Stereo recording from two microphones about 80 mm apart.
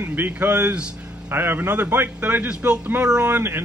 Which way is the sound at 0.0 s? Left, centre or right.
Right.